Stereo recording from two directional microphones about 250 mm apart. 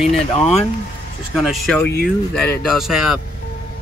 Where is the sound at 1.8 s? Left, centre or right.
Left.